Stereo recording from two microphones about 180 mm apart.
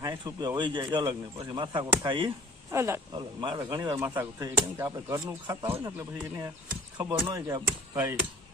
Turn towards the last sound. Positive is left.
turn(degrees=-20)  # may be behind; listen again after turning